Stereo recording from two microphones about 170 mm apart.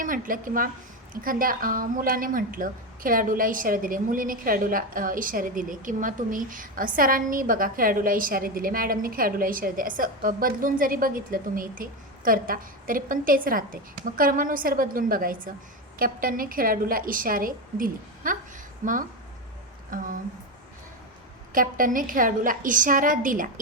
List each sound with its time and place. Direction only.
0.0 s a woman's voice: 55° right (ahead or behind)
21.5 s a woman's voice: 55° right (ahead or behind)